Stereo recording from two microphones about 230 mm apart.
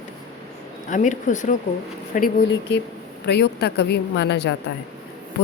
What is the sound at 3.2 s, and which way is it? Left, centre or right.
A woman's voice, left.